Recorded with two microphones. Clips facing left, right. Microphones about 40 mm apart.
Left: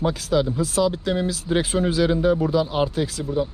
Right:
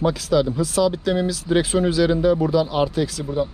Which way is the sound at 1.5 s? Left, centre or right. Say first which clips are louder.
Right 3 dB; right.